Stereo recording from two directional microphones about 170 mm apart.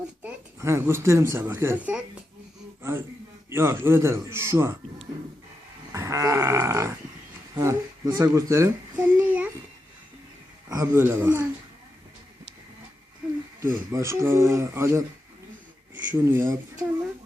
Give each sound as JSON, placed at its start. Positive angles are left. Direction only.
{"t": 0.2, "sound": "speech", "side_deg": -15}
{"t": 3.5, "sound": "speech", "side_deg": -15}
{"t": 5.9, "sound": "grunt", "side_deg": -20}
{"t": 7.5, "sound": "a sound", "side_deg": -20}
{"t": 10.7, "sound": "speech", "side_deg": -20}
{"t": 13.6, "sound": "speech", "side_deg": -15}
{"t": 16.0, "sound": "speech", "side_deg": -15}